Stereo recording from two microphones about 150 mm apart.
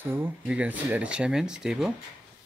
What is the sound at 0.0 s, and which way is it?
Speech, 15° right (ahead or behind).